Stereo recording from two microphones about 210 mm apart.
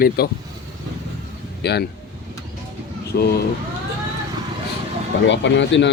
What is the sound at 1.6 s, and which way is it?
Speech, 50° left (ahead or behind).